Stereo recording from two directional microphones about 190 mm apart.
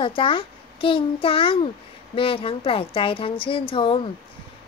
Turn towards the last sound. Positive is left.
turn(degrees=25)  # may be behind; listen again after turning